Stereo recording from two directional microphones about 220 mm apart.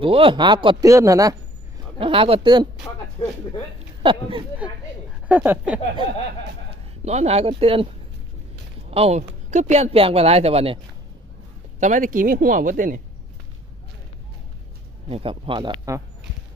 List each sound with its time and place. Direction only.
0.0 s speech: 25° right (ahead or behind)
4.0 s speech: 20° right (ahead or behind)
5.3 s speech: 10° right (ahead or behind)
6.7 s speech: 30° right (ahead or behind)
8.9 s speech: 25° right (ahead or behind)
11.8 s speech: 35° right (ahead or behind)
15.0 s speech: 25° right (ahead or behind)